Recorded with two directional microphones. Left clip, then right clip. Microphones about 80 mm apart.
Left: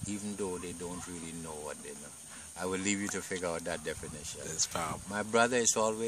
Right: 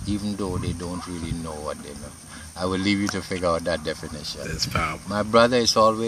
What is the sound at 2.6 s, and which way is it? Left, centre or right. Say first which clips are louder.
Speech: right 10 dB; left.